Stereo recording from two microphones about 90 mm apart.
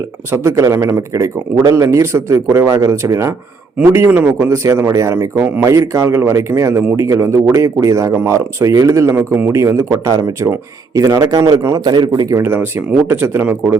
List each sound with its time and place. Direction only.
0.3 s speech: 35° right (ahead or behind)
9.1 s speech: 20° right (ahead or behind)
9.5 s speech: 30° right (ahead or behind)
11.9 s a man's voice: 50° right (ahead or behind)
12.4 s speech: 20° right (ahead or behind)